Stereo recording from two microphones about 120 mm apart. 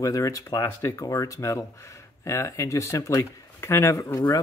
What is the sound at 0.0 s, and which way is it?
A man's voice, 30° left (ahead or behind).